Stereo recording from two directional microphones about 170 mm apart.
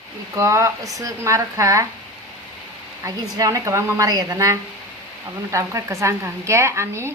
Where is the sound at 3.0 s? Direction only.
20° right (ahead or behind).